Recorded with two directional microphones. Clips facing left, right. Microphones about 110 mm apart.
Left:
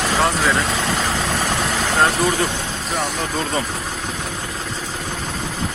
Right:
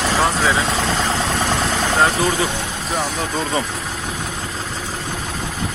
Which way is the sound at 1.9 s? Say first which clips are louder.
Even; centre (ahead or behind).